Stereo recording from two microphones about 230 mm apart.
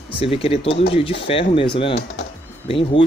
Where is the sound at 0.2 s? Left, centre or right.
Left.